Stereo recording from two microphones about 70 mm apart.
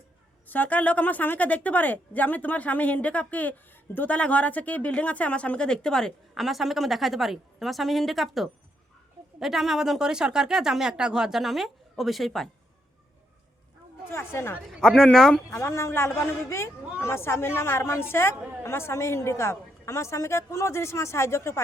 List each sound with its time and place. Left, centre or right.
0.4 s a woman's voice: left; by 12.5 s centre
14.1 s a woman's voice: left
14.7 s speech: centre
15.4 s a woman's voice: left